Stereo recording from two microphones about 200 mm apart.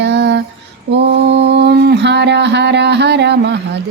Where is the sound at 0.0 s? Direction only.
60° right (ahead or behind).